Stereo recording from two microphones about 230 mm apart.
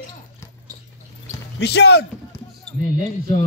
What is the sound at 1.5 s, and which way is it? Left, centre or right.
Speech, left.